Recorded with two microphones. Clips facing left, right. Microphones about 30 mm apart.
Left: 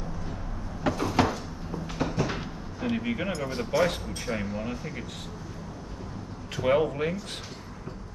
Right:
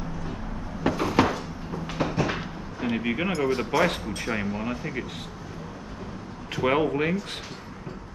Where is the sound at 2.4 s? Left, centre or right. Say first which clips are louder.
Right 2 dB; right.